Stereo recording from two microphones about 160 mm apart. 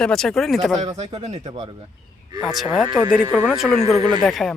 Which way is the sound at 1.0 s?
40° right (ahead or behind).